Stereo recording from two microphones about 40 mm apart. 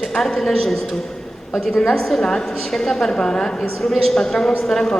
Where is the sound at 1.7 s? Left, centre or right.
Left.